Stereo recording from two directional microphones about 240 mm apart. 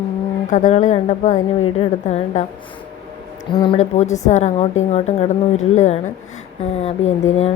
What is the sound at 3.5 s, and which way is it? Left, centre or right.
Speech, left.